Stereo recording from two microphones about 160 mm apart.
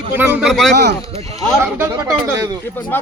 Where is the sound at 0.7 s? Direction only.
90° right.